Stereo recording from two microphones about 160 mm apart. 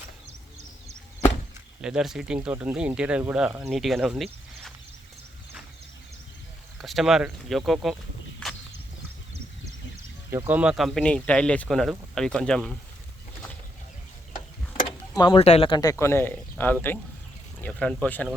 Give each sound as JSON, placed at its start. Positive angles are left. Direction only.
{"t": 1.8, "sound": "speech", "side_deg": -5}
{"t": 6.7, "sound": "speech", "side_deg": 0}
{"t": 10.3, "sound": "speech", "side_deg": -10}
{"t": 15.1, "sound": "speech", "side_deg": 30}